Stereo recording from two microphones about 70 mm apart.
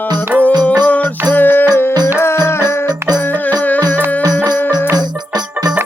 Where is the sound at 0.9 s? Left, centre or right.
Left.